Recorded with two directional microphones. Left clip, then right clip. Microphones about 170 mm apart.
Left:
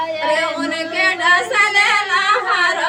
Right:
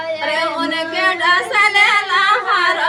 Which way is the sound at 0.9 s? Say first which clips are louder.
Left 1 dB; 15° right (ahead or behind).